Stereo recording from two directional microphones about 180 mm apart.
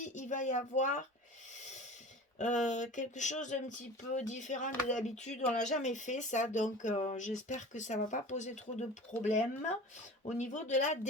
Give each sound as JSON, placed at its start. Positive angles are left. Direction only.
{"t": 0.0, "sound": "speech", "side_deg": 40}
{"t": 2.4, "sound": "speech", "side_deg": 45}